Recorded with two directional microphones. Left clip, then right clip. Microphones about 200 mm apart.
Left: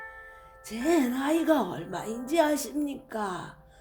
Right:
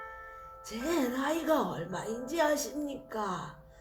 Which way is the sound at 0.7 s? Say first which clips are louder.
Left 6 dB; 60° left (ahead or behind).